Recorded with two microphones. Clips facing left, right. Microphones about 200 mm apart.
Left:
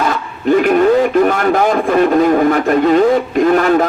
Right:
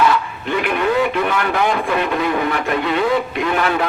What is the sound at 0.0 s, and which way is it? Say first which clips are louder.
Speech: left 1 dB; 45° left (ahead or behind).